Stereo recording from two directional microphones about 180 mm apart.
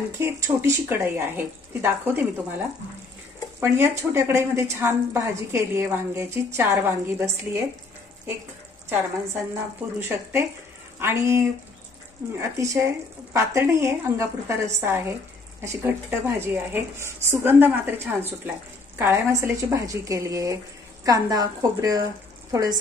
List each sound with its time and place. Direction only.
0.2 s a woman's voice: 15° right (ahead or behind)
3.6 s a woman's voice: 15° right (ahead or behind)
9.9 s a woman's voice: 15° right (ahead or behind)